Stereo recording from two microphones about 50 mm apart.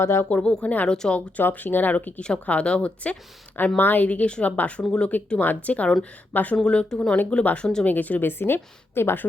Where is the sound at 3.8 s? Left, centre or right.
Left.